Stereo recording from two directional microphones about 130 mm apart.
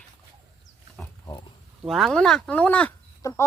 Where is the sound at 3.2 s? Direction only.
25° left (ahead or behind).